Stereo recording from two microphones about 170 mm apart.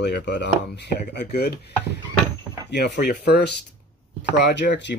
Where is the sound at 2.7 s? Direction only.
90° left.